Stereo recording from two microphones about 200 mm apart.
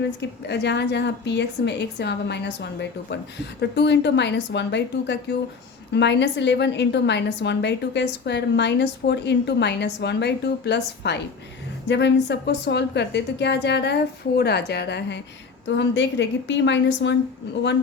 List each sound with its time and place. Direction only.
0.2 s a woman's voice: 60° left (ahead or behind)